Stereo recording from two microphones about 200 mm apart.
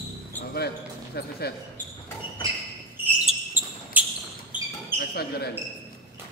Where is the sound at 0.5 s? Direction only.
50° left (ahead or behind).